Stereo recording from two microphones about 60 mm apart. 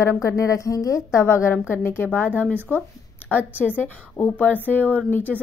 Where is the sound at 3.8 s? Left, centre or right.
Left.